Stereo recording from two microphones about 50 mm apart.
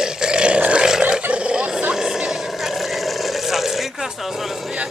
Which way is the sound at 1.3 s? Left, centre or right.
Right.